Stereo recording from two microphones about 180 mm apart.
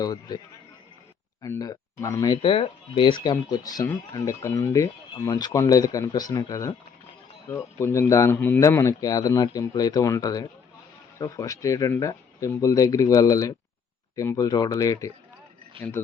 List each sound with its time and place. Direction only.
0.0 s speech: 20° left (ahead or behind)